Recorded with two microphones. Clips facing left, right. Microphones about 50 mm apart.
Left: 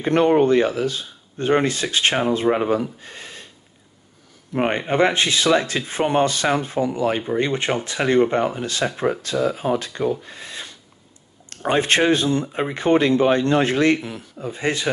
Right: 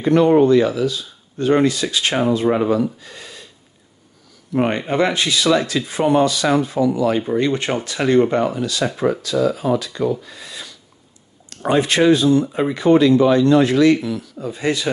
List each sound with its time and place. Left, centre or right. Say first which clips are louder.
0.0 s speech: right 3 dB; left
2.4 s speech: right 2 dB; centre
2.7 s speech: right 3 dB; left
4.6 s speech: right 1 dB; left
8.5 s speech: right 3 dB; left